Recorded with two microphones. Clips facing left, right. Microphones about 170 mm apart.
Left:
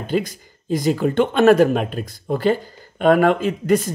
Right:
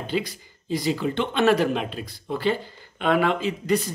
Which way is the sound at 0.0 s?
45° left (ahead or behind).